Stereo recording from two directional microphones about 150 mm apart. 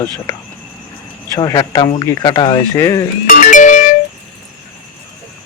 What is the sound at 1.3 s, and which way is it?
Speech, 25° left (ahead or behind).